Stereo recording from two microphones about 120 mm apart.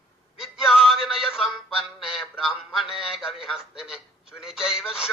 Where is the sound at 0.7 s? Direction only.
5° right (ahead or behind).